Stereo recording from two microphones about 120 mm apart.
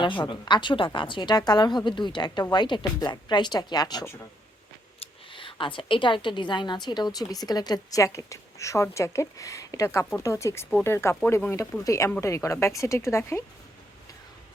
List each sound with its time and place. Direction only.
0.0 s a woman's voice: 45° left (ahead or behind)
4.9 s a woman's voice: 45° left (ahead or behind); by 11.8 s 15° left (ahead or behind)
11.9 s speech: 25° left (ahead or behind)